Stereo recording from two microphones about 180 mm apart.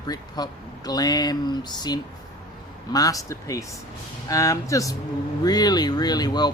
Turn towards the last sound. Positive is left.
turn(degrees=25)  # may be behind; listen again after turning